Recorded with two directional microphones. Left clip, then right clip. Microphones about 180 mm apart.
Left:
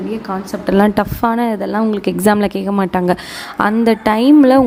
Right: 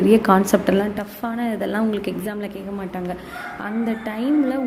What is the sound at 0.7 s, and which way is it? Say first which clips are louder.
A woman's voice: left 8 dB; 40° left (ahead or behind).